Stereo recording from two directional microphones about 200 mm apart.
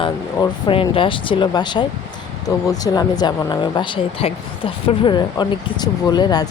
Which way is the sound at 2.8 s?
20° left (ahead or behind).